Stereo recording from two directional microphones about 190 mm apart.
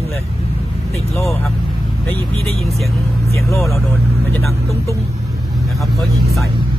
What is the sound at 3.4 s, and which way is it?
Speech, 15° left (ahead or behind).